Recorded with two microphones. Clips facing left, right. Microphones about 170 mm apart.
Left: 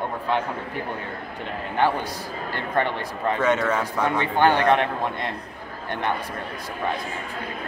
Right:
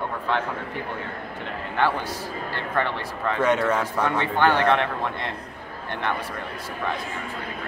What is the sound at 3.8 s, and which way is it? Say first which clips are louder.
A man's voice: even; 15° left (ahead or behind).